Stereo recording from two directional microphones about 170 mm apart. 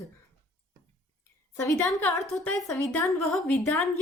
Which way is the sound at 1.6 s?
15° left (ahead or behind).